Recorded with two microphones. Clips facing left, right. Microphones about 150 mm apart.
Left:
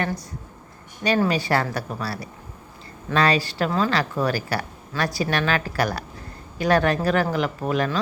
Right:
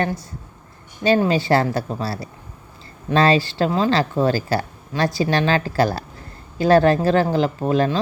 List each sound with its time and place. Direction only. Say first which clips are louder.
1.0 s speech: right 4 dB; 30° right (ahead or behind)